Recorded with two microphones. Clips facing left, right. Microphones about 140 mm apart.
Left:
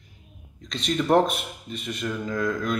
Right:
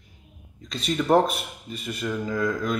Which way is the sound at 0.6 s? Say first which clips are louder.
Even; 5° right (ahead or behind).